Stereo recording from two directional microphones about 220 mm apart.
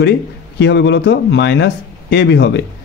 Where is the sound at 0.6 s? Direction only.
50° left (ahead or behind).